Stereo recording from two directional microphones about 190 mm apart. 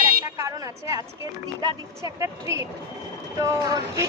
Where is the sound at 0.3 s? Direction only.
15° right (ahead or behind).